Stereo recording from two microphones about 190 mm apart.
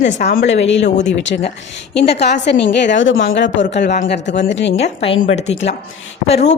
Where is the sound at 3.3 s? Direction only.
70° left (ahead or behind).